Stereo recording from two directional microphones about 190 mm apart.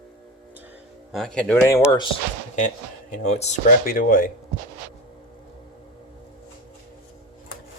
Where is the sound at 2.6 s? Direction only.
40° left (ahead or behind).